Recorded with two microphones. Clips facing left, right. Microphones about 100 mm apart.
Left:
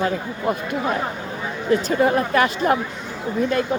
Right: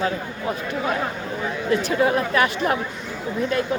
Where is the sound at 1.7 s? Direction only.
40° left (ahead or behind).